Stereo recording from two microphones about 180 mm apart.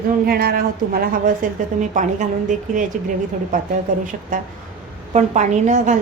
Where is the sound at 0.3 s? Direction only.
55° right (ahead or behind).